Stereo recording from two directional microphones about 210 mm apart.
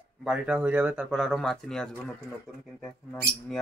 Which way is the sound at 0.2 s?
5° right (ahead or behind).